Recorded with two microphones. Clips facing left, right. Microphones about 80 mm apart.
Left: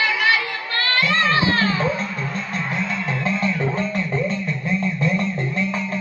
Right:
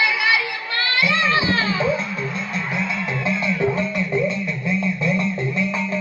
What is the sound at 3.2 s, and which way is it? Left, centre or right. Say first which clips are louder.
Music: right 2 dB; left.